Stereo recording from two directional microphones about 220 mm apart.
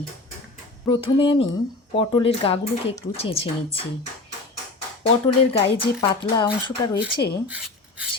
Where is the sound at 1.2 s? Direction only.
25° left (ahead or behind).